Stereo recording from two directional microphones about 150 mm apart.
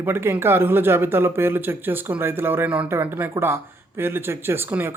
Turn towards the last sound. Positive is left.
turn(degrees=-15)  # may be behind; listen again after turning